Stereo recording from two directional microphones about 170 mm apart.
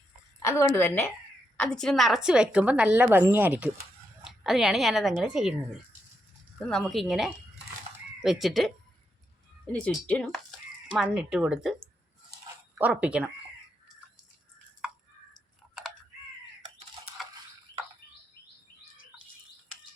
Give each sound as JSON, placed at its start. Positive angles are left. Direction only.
{"t": 0.4, "sound": "a woman's voice", "side_deg": 15}
{"t": 6.7, "sound": "speech", "side_deg": 5}
{"t": 9.7, "sound": "speech", "side_deg": 5}
{"t": 12.7, "sound": "a woman's voice", "side_deg": -5}